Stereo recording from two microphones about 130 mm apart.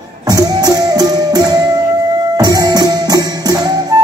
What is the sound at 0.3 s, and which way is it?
Music, 30° right (ahead or behind).